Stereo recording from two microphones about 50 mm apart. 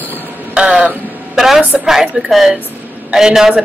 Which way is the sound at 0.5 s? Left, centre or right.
Right.